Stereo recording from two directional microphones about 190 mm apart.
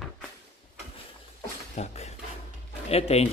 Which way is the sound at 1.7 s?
35° left (ahead or behind).